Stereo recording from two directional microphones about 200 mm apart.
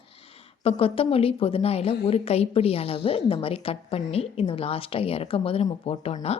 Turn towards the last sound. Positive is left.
turn(degrees=30)  # may be behind; listen again after turning